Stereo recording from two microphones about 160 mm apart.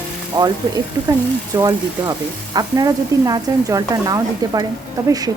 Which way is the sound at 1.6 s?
25° right (ahead or behind).